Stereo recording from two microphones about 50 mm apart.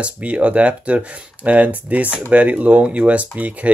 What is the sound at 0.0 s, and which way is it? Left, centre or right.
Speech, right.